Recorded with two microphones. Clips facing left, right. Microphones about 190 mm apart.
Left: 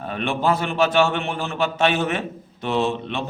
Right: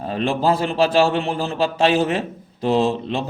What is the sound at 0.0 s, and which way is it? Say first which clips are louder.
A man's voice: right 3 dB; 35° right (ahead or behind).